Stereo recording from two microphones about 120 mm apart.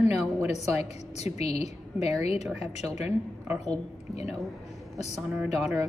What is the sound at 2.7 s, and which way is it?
Speech, 65° left (ahead or behind).